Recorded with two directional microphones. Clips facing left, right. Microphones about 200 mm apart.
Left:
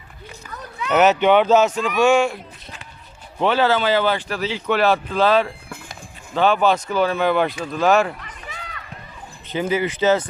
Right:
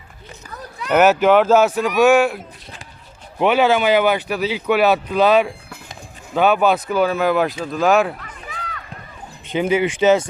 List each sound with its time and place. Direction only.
0.9 s speech: 10° right (ahead or behind)
3.4 s speech: 15° right (ahead or behind)
9.5 s speech: 15° right (ahead or behind)